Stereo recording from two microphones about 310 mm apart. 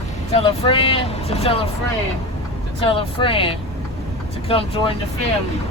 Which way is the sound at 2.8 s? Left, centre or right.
Centre.